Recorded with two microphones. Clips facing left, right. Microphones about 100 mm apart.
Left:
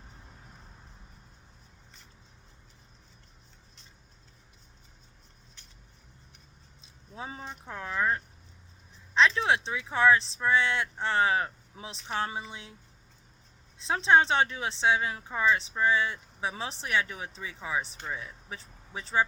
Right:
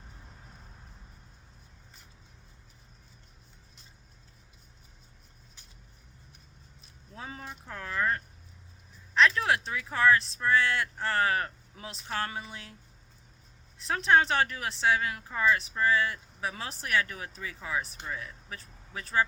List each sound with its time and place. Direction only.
6.8 s speech: 20° left (ahead or behind)
13.7 s speech: 20° left (ahead or behind)